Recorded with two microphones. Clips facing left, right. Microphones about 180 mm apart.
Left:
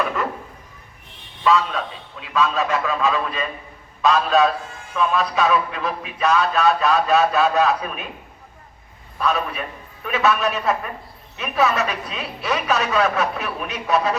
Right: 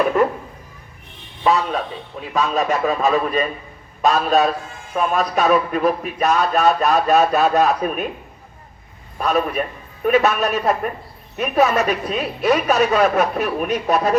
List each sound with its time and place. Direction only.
1.5 s a man's voice: 40° right (ahead or behind)
9.1 s a man's voice: 45° right (ahead or behind)